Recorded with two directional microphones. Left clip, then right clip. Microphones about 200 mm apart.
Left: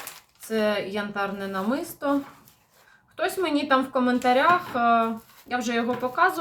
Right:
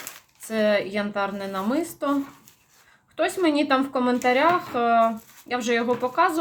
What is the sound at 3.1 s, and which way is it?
A woman's voice, 35° right (ahead or behind).